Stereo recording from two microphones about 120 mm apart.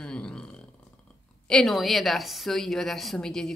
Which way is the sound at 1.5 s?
Centre (ahead or behind).